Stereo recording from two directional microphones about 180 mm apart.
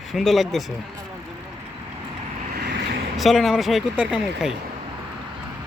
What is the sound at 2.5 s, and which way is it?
Vehicle, 70° right (ahead or behind).